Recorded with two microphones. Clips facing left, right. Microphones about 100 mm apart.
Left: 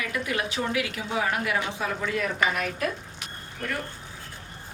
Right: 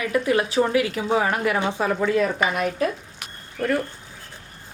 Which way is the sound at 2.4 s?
25° right (ahead or behind).